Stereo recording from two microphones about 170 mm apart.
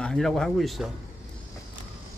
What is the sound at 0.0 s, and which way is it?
Speech, 5° left (ahead or behind).